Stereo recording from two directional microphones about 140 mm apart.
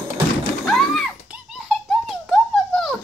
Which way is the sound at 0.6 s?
Centre (ahead or behind).